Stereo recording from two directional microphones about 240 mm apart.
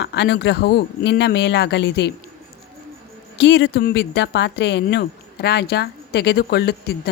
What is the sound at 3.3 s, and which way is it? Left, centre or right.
Speech, left.